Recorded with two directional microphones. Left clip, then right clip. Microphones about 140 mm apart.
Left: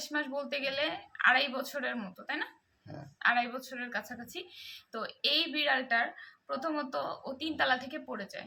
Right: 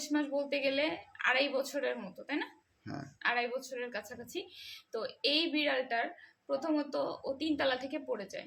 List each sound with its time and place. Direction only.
0.0 s a woman's voice: 20° right (ahead or behind)